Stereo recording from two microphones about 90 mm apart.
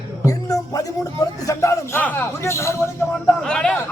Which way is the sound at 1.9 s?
20° left (ahead or behind).